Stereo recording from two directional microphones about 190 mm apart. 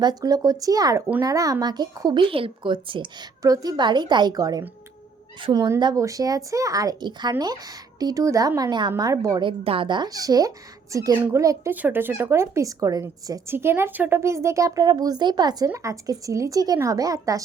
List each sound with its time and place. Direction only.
0.0 s speech: 20° right (ahead or behind)